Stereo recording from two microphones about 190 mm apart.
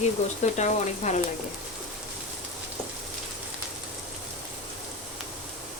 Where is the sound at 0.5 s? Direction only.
40° left (ahead or behind).